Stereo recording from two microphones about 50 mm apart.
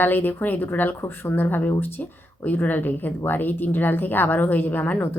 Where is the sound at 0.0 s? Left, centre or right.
Left.